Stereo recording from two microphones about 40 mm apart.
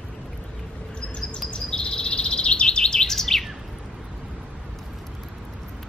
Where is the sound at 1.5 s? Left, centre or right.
Left; by 3.4 s centre.